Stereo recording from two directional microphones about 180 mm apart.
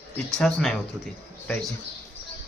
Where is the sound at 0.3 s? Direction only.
Centre (ahead or behind).